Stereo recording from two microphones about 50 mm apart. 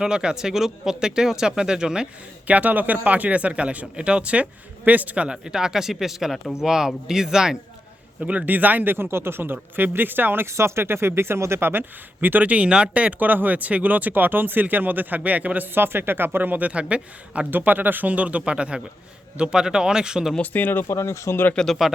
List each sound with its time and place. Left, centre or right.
0.0 s speech: centre
2.5 s speech: right; by 7.6 s centre
8.2 s speech: right
10.4 s speech: right
11.7 s speech: right
17.5 s speech: right; by 20.3 s centre
20.4 s speech: left
20.8 s speech: left
21.5 s speech: centre